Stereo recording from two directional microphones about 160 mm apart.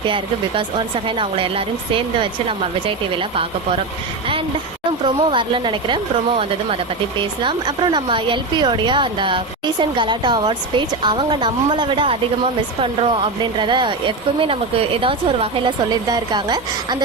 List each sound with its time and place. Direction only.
0.1 s speech: 30° right (ahead or behind)
5.0 s speech: 30° right (ahead or behind)